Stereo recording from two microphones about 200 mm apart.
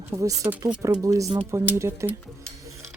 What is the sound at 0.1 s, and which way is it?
Speech, 15° right (ahead or behind).